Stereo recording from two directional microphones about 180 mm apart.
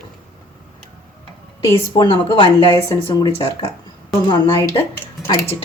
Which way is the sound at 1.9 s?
25° left (ahead or behind).